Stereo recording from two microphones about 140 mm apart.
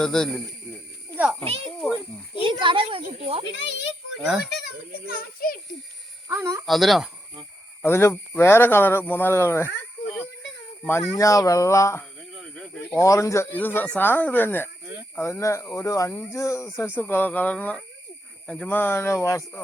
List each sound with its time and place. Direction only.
0.0 s a child's voice: 5° left (ahead or behind)
1.1 s a sound: 10° right (ahead or behind)
1.5 s a child's voice: 45° right (ahead or behind)
4.2 s a child's voice: 5° right (ahead or behind)
5.4 s a child's voice: 90° left
6.2 s speech: 20° right (ahead or behind)
6.7 s a child's voice: centre (ahead or behind)
7.8 s speech: 15° left (ahead or behind)
10.8 s speech: 20° left (ahead or behind)
12.4 s snake: 5° left (ahead or behind)
12.8 s speech: 20° left (ahead or behind)